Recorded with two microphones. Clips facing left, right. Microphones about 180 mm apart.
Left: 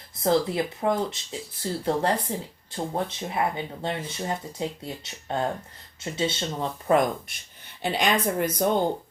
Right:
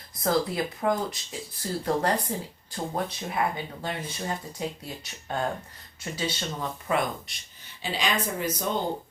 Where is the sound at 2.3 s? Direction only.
25° left (ahead or behind).